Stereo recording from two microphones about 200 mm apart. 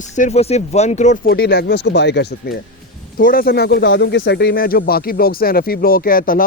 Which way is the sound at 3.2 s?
45° left (ahead or behind).